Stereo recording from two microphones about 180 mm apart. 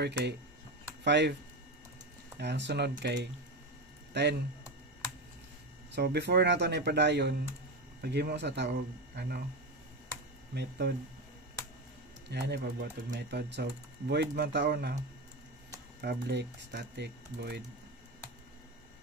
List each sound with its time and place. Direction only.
0.0 s speech: 70° right (ahead or behind)
2.3 s speech: 70° right (ahead or behind)
5.9 s speech: 65° right (ahead or behind)
10.5 s speech: 65° right (ahead or behind)
12.3 s speech: 70° right (ahead or behind)
16.0 s speech: 65° right (ahead or behind)